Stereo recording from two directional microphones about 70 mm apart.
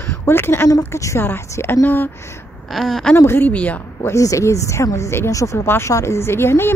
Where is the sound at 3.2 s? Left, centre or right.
Left.